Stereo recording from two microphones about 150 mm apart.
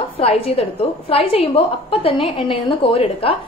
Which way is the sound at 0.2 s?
40° left (ahead or behind).